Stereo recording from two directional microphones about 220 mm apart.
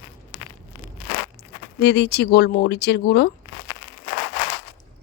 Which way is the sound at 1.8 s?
50° left (ahead or behind).